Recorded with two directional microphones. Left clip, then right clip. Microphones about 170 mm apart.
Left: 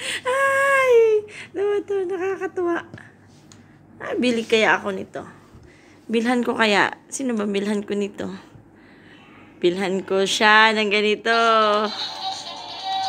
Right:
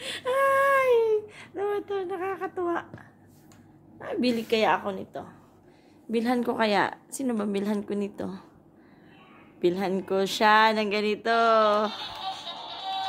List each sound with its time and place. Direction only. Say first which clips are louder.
0.0 s a sound: left 4 dB; 10° left (ahead or behind)
4.0 s a woman's voice: left 6 dB; 5° left (ahead or behind)
9.6 s speech: left 5 dB; 5° right (ahead or behind)